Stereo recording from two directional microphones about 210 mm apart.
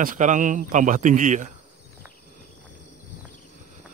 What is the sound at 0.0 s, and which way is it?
A man's voice, 40° right (ahead or behind).